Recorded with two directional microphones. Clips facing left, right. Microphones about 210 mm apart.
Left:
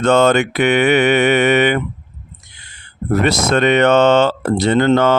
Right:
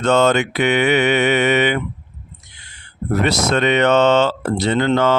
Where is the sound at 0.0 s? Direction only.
55° left (ahead or behind).